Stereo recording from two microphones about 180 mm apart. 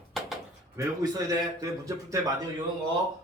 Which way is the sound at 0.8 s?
15° right (ahead or behind).